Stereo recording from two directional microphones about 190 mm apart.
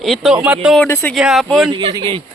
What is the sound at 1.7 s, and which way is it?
Speech, 25° right (ahead or behind).